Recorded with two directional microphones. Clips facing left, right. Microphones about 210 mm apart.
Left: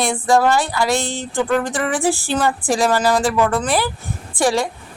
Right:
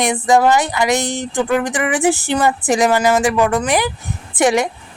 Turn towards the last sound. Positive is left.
turn(degrees=-20)  # may be behind; listen again after turning